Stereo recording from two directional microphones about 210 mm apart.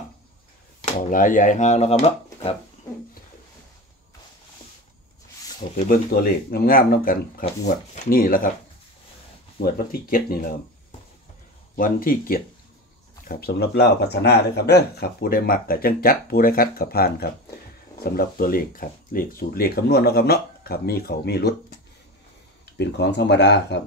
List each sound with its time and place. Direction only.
1.1 s speech: 40° left (ahead or behind)
5.8 s speech: 40° left (ahead or behind)
9.6 s speech: 45° left (ahead or behind)
11.7 s speech: 40° left (ahead or behind)
22.8 s speech: 55° left (ahead or behind)